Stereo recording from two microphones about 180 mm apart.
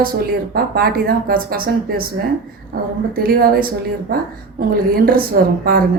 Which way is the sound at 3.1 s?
55° right (ahead or behind).